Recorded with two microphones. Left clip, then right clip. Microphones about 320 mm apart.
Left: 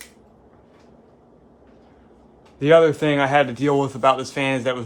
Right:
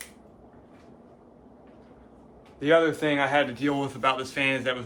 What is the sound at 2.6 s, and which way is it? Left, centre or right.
A man's voice, left.